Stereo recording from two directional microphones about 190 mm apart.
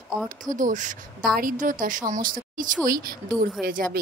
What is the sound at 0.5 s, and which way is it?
Speech, 45° right (ahead or behind).